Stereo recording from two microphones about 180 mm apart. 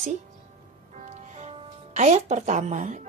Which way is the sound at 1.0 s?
40° right (ahead or behind).